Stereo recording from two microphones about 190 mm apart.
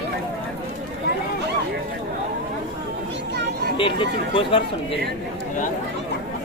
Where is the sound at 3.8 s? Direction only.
25° left (ahead or behind).